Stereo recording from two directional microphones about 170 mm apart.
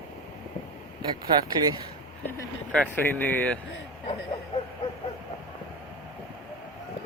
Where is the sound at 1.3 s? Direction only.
25° right (ahead or behind).